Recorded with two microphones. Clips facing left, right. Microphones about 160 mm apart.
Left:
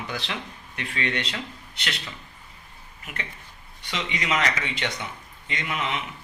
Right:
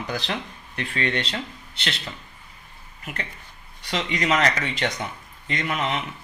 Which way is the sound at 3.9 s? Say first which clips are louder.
Right 4 dB; 40° right (ahead or behind).